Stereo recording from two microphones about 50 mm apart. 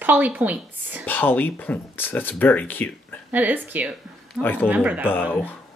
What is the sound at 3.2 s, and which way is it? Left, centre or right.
A woman's voice, right.